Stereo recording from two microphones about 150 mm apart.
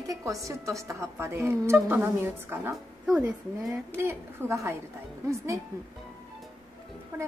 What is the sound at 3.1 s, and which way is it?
Speech, 5° right (ahead or behind).